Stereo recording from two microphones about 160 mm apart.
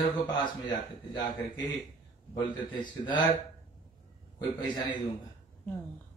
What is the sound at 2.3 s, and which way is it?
Speech, 30° left (ahead or behind).